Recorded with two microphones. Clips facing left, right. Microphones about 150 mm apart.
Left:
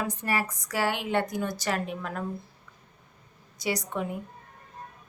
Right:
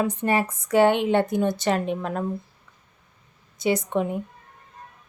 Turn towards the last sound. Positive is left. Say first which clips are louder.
# right 7 dB
turn(degrees=-25)  # may be behind; listen again after turning